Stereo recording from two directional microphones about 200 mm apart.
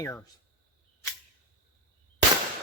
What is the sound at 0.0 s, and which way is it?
Speech, 15° left (ahead or behind).